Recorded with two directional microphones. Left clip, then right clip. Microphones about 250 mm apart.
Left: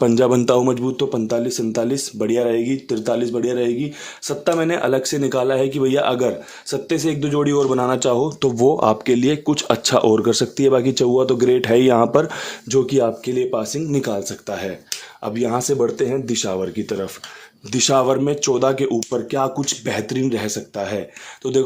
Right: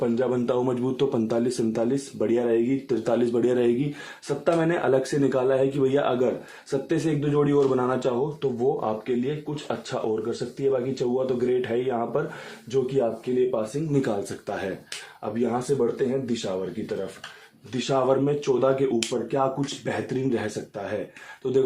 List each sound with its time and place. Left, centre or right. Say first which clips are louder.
0.0 s speech: left 9 dB; left; by 3.8 s centre
4.3 s speech: left 4 dB; left
13.9 s speech: left 3 dB; left
15.2 s speech: left 5 dB; left
17.7 s speech: left 7 dB; left